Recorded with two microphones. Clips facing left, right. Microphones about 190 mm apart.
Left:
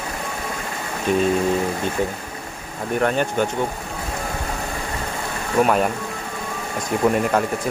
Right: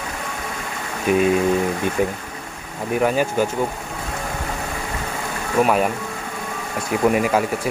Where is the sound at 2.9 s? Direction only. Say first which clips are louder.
Right 1 dB; 5° right (ahead or behind).